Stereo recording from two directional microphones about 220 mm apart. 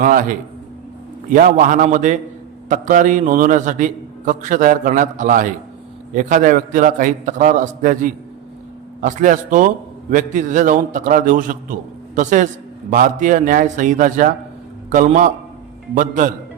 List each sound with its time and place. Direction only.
0.0 s a man's voice: 40° right (ahead or behind)